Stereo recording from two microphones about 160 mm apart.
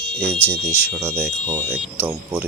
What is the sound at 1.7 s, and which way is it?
Speech, 10° right (ahead or behind).